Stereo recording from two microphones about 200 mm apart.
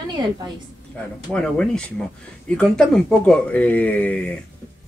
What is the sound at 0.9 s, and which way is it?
Speech, 5° left (ahead or behind).